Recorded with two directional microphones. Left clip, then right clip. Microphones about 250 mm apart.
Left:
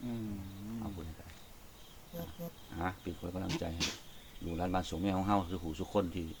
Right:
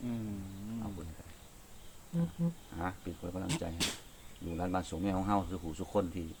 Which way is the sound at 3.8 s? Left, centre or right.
Right.